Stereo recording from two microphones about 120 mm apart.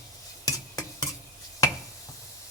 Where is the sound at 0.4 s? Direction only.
30° left (ahead or behind).